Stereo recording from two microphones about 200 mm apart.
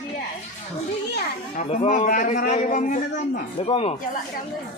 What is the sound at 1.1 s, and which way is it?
Speech, 40° left (ahead or behind).